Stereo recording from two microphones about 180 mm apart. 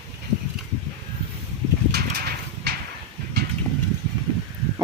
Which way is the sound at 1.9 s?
60° right (ahead or behind).